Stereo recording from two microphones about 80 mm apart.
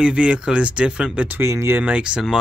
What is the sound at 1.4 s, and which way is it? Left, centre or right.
Speech, right.